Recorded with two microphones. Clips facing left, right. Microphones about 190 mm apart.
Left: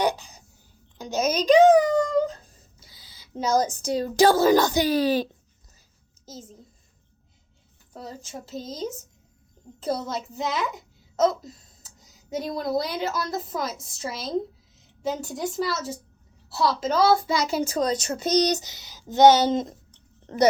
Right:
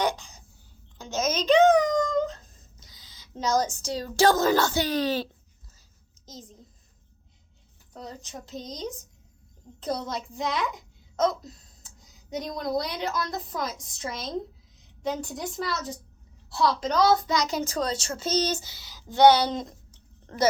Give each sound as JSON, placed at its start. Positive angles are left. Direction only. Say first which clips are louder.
{"t": 0.0, "sound": "a sound", "louder": "left 3 dB", "side_deg": 10}
{"t": 3.8, "sound": "a woman's voice", "louder": "left 3 dB", "side_deg": 10}
{"t": 7.9, "sound": "a woman's voice", "louder": "left 2 dB", "side_deg": 5}